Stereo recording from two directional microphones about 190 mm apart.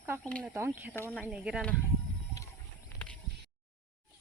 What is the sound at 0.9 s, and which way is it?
Speech, 10° left (ahead or behind).